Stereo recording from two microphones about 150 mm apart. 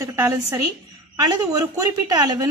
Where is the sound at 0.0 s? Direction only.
20° right (ahead or behind).